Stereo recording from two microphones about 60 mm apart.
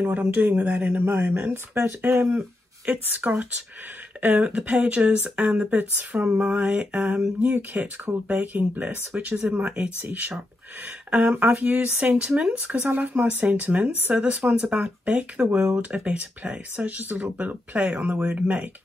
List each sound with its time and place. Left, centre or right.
0.0 s speech: right
2.3 s speech: right
7.3 s speech: right
11.1 s speech: right
12.9 s speech: right